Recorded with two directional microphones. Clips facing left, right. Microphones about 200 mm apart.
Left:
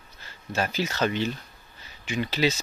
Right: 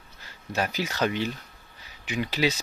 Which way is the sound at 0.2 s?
15° right (ahead or behind).